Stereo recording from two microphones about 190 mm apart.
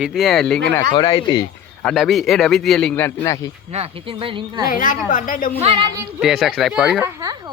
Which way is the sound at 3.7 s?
30° right (ahead or behind).